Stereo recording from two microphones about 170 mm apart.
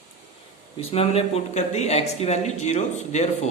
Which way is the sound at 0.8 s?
35° left (ahead or behind).